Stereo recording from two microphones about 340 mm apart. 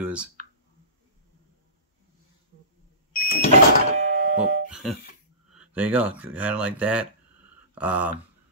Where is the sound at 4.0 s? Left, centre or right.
Right.